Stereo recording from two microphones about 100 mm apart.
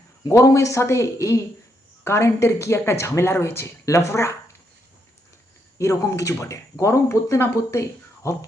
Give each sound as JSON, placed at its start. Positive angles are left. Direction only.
{"t": 0.3, "sound": "speech", "side_deg": 30}
{"t": 5.8, "sound": "speech", "side_deg": 30}